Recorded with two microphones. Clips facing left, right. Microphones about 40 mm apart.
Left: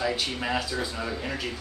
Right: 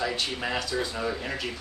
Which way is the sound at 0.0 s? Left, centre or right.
Centre.